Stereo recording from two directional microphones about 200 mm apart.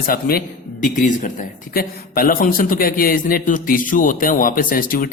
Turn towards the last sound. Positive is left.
turn(degrees=45)  # may be behind; listen again after turning